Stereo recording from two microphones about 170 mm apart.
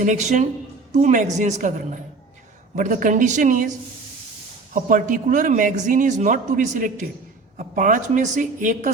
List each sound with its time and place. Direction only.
0.0 s a man's voice: 45° right (ahead or behind)